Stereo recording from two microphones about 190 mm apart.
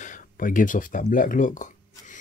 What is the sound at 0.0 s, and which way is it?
Speech, 45° left (ahead or behind).